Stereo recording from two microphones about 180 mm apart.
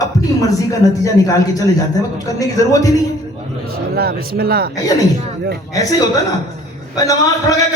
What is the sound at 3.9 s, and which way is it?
Speech, 60° right (ahead or behind).